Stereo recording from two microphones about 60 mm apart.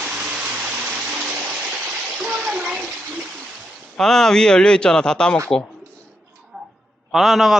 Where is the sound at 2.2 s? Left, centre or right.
Centre.